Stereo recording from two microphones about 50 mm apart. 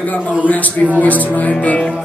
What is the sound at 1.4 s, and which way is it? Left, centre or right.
Music, centre.